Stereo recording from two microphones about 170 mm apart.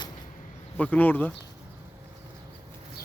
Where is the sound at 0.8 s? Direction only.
10° left (ahead or behind).